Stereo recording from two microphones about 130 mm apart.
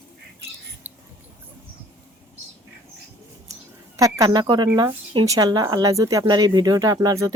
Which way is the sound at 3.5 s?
25° right (ahead or behind).